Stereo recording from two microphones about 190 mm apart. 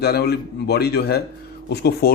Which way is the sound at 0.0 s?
55° left (ahead or behind).